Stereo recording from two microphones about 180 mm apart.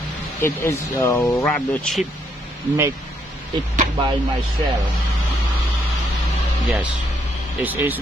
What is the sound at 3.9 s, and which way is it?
Speech, 25° right (ahead or behind).